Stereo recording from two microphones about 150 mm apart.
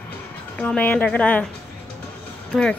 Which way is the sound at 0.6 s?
10° left (ahead or behind).